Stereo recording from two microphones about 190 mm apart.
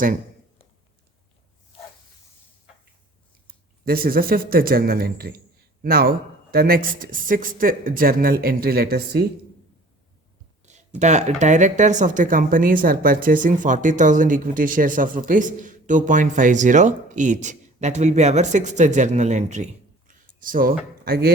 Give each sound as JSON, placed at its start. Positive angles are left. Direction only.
{"t": 3.4, "sound": "speech", "side_deg": -50}
{"t": 10.6, "sound": "speech", "side_deg": -40}
{"t": 20.1, "sound": "a sound", "side_deg": -45}